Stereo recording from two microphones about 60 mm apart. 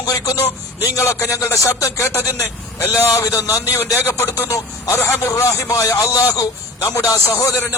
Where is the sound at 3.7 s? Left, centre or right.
Left.